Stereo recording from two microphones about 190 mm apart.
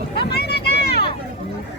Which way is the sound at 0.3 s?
60° left (ahead or behind).